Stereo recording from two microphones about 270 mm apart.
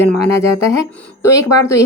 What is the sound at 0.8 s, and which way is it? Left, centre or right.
Speech, centre.